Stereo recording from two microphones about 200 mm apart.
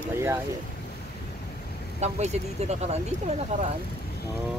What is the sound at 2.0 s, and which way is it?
Speech, 35° right (ahead or behind).